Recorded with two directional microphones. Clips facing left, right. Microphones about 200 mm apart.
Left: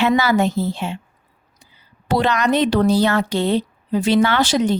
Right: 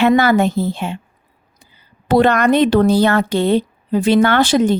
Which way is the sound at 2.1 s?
55° right (ahead or behind).